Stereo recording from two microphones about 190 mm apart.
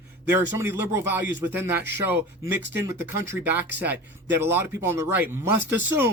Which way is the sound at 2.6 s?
70° right (ahead or behind).